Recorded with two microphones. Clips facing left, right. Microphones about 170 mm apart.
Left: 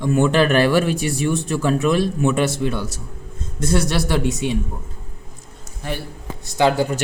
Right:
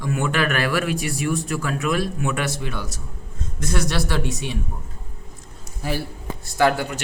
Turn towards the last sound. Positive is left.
turn(degrees=20)  # may be behind; listen again after turning